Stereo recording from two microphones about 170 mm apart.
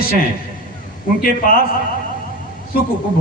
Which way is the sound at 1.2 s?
55° left (ahead or behind).